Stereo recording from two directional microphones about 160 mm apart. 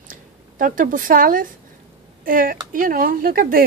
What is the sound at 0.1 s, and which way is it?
A woman's voice, 60° right (ahead or behind).